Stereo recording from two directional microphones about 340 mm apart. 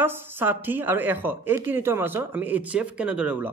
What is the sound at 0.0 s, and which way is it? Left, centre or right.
A woman's voice, centre.